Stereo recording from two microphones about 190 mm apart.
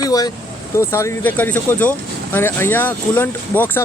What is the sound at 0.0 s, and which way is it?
Vehicle, 20° left (ahead or behind).